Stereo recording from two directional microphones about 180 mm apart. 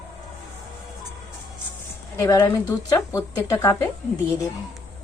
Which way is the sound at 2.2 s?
20° left (ahead or behind).